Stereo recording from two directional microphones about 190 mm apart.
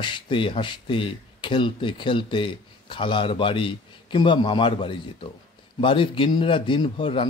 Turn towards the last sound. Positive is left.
turn(degrees=30)  # may be behind; listen again after turning